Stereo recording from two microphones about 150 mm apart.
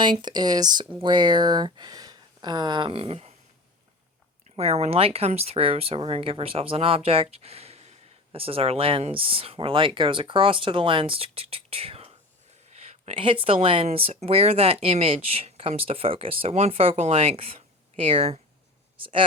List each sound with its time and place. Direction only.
0.0 s speech: 30° right (ahead or behind)
4.5 s speech: 40° right (ahead or behind)